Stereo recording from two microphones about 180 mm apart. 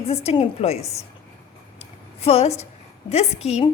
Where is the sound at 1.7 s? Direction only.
35° left (ahead or behind).